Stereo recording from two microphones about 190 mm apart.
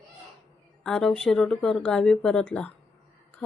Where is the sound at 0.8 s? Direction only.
5° left (ahead or behind).